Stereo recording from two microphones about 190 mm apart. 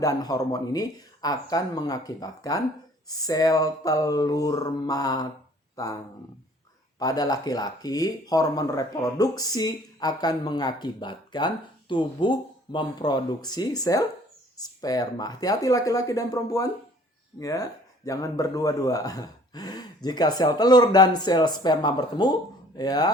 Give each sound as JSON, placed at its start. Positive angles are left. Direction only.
{"t": 0.0, "sound": "speech", "side_deg": 20}
{"t": 7.0, "sound": "speech", "side_deg": 20}